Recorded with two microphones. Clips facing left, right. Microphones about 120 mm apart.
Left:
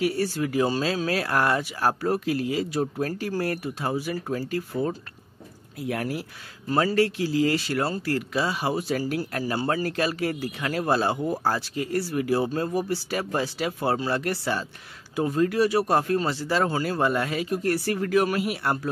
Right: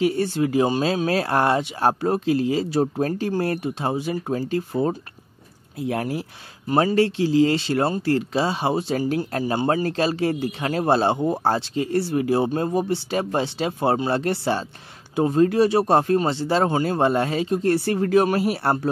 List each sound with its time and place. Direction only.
0.0 s speech: 25° right (ahead or behind)